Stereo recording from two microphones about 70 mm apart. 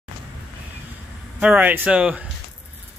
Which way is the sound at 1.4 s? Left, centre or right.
Right.